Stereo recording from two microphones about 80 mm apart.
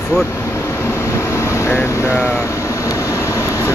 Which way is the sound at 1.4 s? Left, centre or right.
Left.